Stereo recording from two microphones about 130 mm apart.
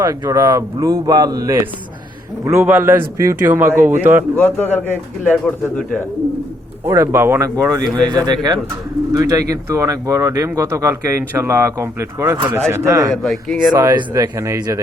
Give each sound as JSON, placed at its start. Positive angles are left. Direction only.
{"t": 0.0, "sound": "speech", "side_deg": -25}
{"t": 4.4, "sound": "speech", "side_deg": 15}
{"t": 6.8, "sound": "speech", "side_deg": -20}
{"t": 13.2, "sound": "speech", "side_deg": 0}
{"t": 13.7, "sound": "speech", "side_deg": -30}